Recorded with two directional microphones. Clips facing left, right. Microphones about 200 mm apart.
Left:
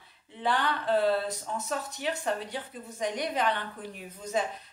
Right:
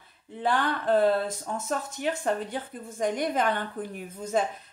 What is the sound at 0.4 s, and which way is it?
Speech, 50° right (ahead or behind).